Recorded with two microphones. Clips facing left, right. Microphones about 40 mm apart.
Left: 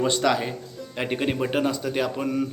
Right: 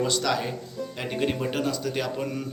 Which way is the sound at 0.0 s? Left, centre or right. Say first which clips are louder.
Left 3 dB; left.